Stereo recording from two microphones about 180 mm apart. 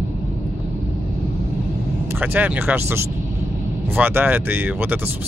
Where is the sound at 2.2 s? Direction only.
10° right (ahead or behind).